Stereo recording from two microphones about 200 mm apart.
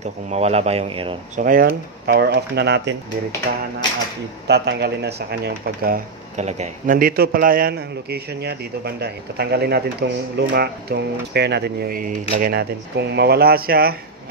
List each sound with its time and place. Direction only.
0.0 s speech: 35° right (ahead or behind)
1.4 s speech: 45° right (ahead or behind)
3.8 s speech: 20° left (ahead or behind)
4.5 s speech: 55° right (ahead or behind)